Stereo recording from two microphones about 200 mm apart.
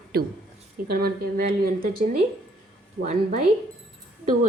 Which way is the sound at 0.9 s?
50° right (ahead or behind).